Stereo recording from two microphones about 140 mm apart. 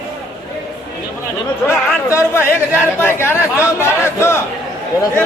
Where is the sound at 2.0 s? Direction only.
20° left (ahead or behind).